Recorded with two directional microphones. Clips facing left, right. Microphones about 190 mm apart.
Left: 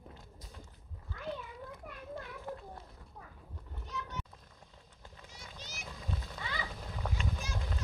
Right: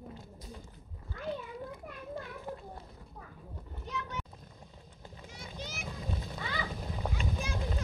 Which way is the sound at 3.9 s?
70° right (ahead or behind).